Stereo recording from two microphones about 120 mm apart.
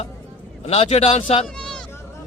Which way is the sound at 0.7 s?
60° left (ahead or behind).